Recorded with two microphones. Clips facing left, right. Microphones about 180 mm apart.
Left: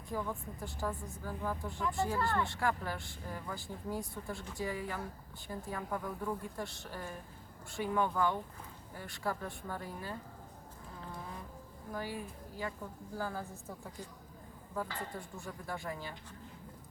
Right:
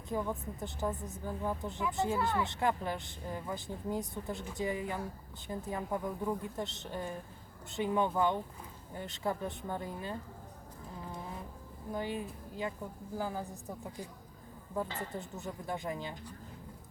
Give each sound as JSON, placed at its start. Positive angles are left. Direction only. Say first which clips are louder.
{"t": 0.1, "sound": "speech", "louder": "right 3 dB", "side_deg": -20}
{"t": 11.9, "sound": "a woman's voice", "louder": "right 4 dB", "side_deg": -20}